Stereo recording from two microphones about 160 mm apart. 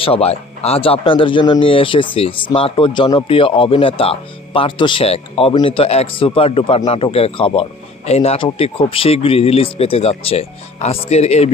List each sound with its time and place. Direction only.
0.0 s speech: 40° left (ahead or behind)